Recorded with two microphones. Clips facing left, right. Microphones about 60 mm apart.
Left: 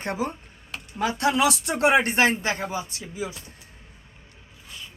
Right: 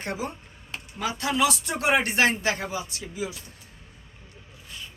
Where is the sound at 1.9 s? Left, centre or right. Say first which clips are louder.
Left 1 dB; left.